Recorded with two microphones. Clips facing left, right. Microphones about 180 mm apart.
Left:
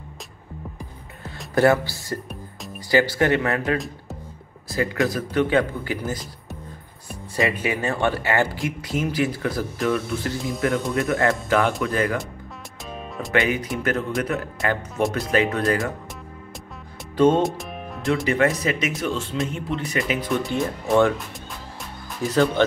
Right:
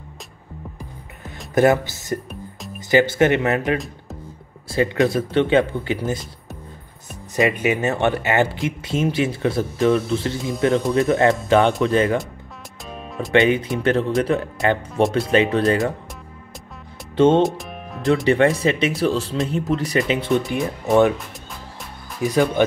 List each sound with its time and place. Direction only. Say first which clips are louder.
1.2 s music: right 2 dB; 20° right (ahead or behind)
2.9 s speech: right 3 dB; 20° right (ahead or behind)
7.3 s speech: right 4 dB; 20° right (ahead or behind)
13.3 s speech: right 6 dB; 25° right (ahead or behind)
17.4 s music: right 4 dB; centre (ahead or behind)
18.2 s speech: right 4 dB; 30° right (ahead or behind)
20.0 s speech: right 3 dB; 25° right (ahead or behind)
22.2 s speech: right 2 dB; 15° right (ahead or behind)